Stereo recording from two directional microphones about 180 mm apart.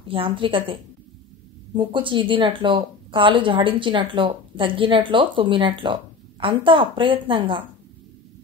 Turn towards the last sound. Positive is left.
turn(degrees=-30)  # may be behind; listen again after turning